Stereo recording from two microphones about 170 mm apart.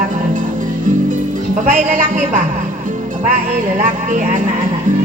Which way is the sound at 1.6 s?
45° right (ahead or behind).